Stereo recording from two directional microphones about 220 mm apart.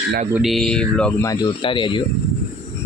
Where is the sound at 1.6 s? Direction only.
20° left (ahead or behind).